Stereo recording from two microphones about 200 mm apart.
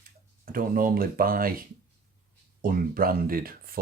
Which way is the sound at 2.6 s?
45° right (ahead or behind).